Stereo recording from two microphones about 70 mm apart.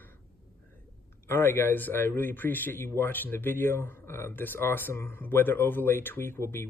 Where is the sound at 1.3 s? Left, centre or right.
Left.